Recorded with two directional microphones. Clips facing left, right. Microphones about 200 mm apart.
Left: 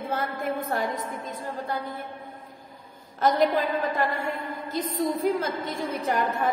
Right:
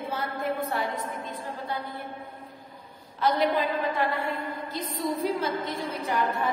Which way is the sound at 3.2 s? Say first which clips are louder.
Left 2 dB; 45° left (ahead or behind).